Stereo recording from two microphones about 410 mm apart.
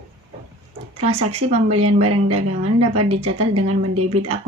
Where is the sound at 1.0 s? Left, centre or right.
Centre.